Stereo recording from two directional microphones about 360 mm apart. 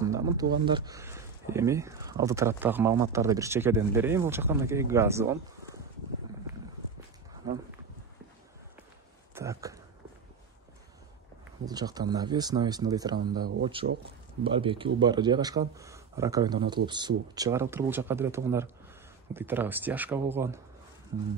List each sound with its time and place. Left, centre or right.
0.0 s a sound: centre
0.7 s speech: centre
9.3 s speech: centre
11.6 s speech: centre
13.8 s speech: right
14.4 s speech: centre